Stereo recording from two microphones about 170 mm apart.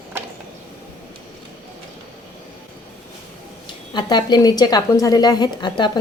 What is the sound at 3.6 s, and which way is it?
A woman's voice, 25° left (ahead or behind).